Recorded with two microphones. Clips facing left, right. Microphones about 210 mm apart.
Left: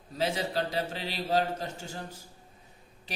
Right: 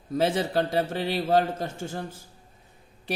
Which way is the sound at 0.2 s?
55° right (ahead or behind).